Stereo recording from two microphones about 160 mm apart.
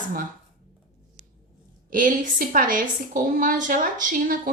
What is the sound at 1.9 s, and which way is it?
A woman's voice, 55° right (ahead or behind).